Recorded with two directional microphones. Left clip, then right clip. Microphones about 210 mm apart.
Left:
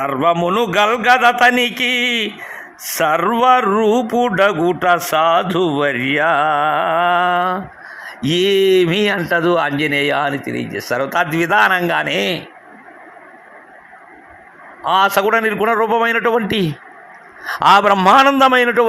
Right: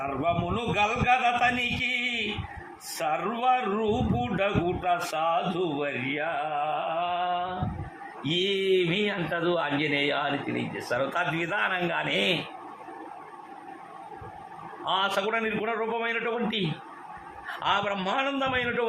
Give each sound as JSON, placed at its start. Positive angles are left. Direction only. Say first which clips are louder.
{"t": 0.0, "sound": "speech", "louder": "left 13 dB", "side_deg": 45}
{"t": 8.3, "sound": "a man's voice", "louder": "left 12 dB", "side_deg": 35}
{"t": 14.8, "sound": "a man's voice", "louder": "left 13 dB", "side_deg": 30}
{"t": 17.6, "sound": "a man's voice", "louder": "left 17 dB", "side_deg": 40}